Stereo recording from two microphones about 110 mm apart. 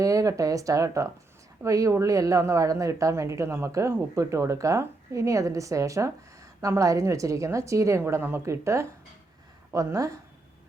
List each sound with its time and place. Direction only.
0.0 s speech: 30° right (ahead or behind)